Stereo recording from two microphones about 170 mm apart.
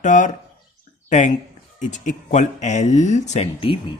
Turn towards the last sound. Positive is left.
turn(degrees=35)  # may be behind; listen again after turning